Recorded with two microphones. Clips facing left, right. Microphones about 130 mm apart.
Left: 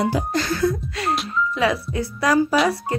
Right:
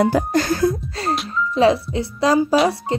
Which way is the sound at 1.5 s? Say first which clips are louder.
Right 9 dB; 30° right (ahead or behind).